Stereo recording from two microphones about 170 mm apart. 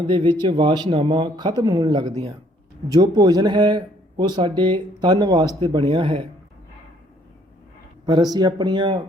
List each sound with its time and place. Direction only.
0.1 s speech: 25° right (ahead or behind)
8.0 s speech: 25° right (ahead or behind)